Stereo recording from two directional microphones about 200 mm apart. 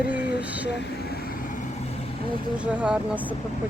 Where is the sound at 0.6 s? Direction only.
60° left (ahead or behind); by 2.3 s 30° left (ahead or behind).